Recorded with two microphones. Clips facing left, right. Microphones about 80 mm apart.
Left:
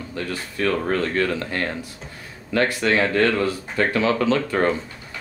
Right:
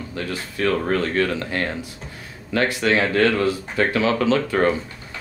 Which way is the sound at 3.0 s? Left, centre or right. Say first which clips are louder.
Even; centre.